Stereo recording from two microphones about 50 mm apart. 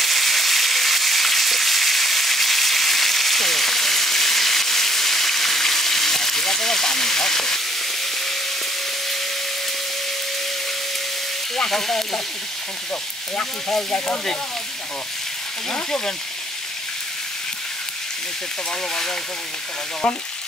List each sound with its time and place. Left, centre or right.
0.0 s frying: centre
11.5 s frying: centre
13.9 s speech: left